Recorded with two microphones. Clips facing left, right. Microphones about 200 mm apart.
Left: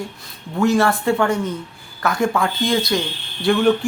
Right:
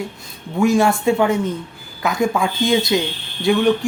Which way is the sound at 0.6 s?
15° right (ahead or behind).